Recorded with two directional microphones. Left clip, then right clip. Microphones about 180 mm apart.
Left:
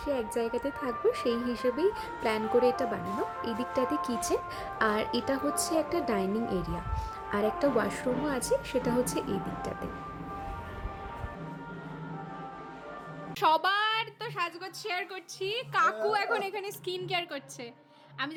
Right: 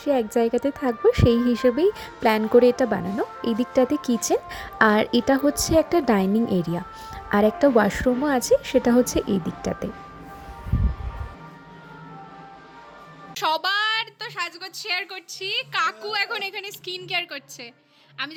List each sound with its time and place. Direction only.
0.0 s speech: 40° right (ahead or behind)
13.3 s a woman's voice: centre (ahead or behind)